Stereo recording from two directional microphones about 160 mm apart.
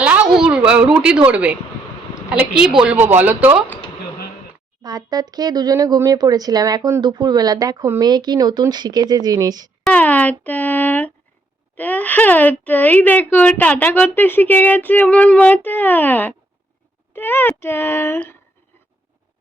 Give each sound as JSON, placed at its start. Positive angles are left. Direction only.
{"t": 0.0, "sound": "a woman's voice", "side_deg": -10}
{"t": 2.8, "sound": "speech", "side_deg": -10}
{"t": 4.8, "sound": "speech", "side_deg": -25}
{"t": 9.8, "sound": "speech", "side_deg": 10}